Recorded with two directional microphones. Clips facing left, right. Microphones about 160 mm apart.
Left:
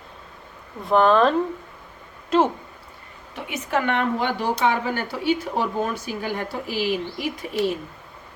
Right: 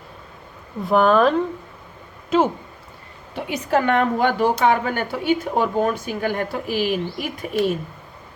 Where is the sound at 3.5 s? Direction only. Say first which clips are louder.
Right 4 dB; 35° right (ahead or behind); by 7.7 s 55° right (ahead or behind).